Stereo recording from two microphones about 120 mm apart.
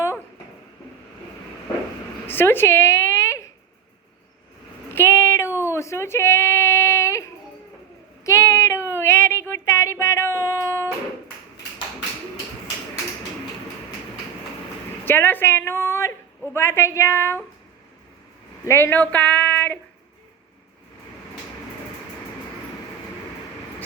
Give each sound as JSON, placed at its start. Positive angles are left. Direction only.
{"t": 2.2, "sound": "a sound", "side_deg": 20}
{"t": 4.9, "sound": "female singing", "side_deg": 20}
{"t": 5.6, "sound": "a sound", "side_deg": 25}
{"t": 8.2, "sound": "child singing", "side_deg": 25}
{"t": 15.0, "sound": "a woman's voice", "side_deg": 15}
{"t": 18.6, "sound": "speech", "side_deg": 20}